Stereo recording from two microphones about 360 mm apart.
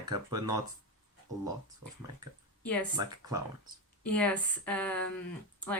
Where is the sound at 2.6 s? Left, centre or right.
Centre.